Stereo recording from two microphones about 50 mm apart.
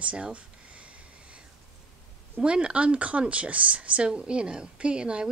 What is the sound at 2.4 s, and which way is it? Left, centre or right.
Speech, centre.